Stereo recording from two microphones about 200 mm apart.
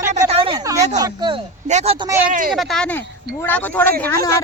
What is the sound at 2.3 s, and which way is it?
Speech, 45° right (ahead or behind).